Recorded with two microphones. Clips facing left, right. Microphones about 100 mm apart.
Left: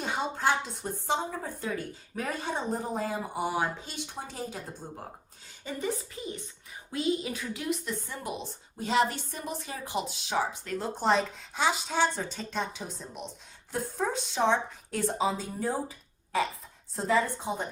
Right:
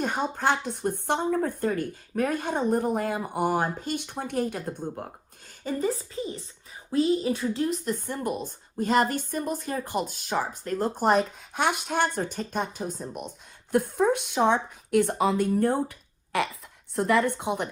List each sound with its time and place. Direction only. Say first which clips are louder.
0.0 s a woman's voice: right 3 dB; 50° right (ahead or behind)
5.6 s a woman's voice: right 5 dB; 35° right (ahead or behind); by 17.7 s 70° right (ahead or behind)